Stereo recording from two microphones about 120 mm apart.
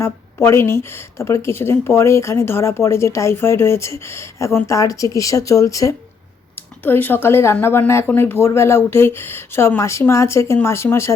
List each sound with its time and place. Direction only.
0.0 s speech: 20° left (ahead or behind)
6.8 s speech: 15° left (ahead or behind)